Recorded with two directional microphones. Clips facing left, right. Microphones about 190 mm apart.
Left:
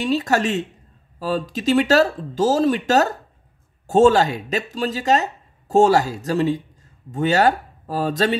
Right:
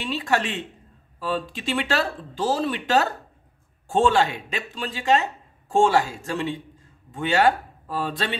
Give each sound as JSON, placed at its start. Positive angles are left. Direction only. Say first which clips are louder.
{"t": 0.0, "sound": "speech", "louder": "left 5 dB", "side_deg": 40}